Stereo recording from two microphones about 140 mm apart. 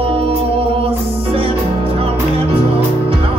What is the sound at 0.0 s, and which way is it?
Music, 45° right (ahead or behind).